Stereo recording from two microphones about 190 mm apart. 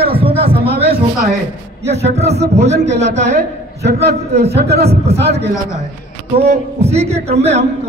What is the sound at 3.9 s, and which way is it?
A man's voice, 55° right (ahead or behind).